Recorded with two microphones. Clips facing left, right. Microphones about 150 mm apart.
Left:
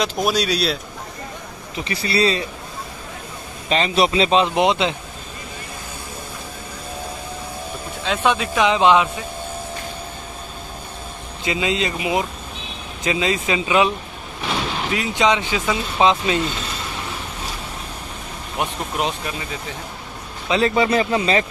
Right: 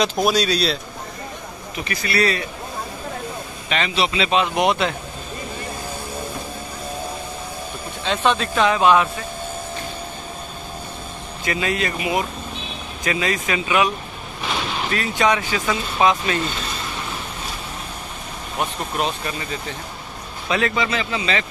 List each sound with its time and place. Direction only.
0.3 s speech: 10° left (ahead or behind)
1.8 s speech: 25° left (ahead or behind)
3.6 s a man's voice: 35° left (ahead or behind)
8.0 s speech: 5° left (ahead or behind)
11.4 s speech: 20° left (ahead or behind)
18.6 s speech: 15° left (ahead or behind)
20.4 s speech: 30° left (ahead or behind)